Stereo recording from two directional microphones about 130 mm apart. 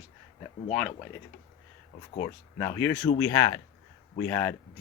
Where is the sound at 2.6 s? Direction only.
15° left (ahead or behind).